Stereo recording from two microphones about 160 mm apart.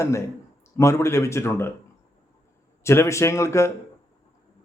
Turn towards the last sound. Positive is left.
turn(degrees=20)  # may be behind; listen again after turning